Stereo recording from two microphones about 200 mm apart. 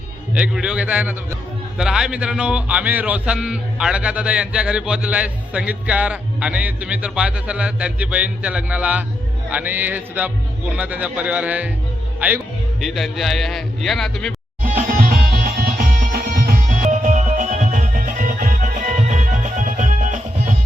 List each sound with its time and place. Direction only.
0.3 s speech: 5° right (ahead or behind)
14.6 s music: 45° right (ahead or behind)